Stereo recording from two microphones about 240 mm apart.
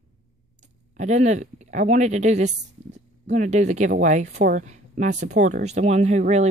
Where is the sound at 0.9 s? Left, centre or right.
Right.